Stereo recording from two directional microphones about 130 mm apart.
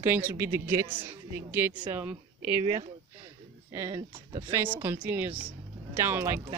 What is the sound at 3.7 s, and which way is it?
A woman's voice, 25° right (ahead or behind).